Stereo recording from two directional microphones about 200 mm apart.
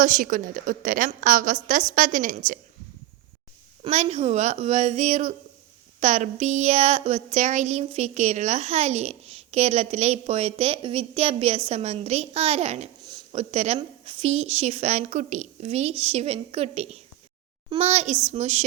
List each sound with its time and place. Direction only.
0.0 s a woman's voice: 40° right (ahead or behind)
3.8 s a woman's voice: 35° right (ahead or behind)
13.1 s a sound: 30° right (ahead or behind)
13.7 s a woman's voice: 25° right (ahead or behind)